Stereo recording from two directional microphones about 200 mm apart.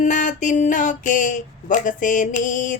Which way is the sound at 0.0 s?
40° left (ahead or behind).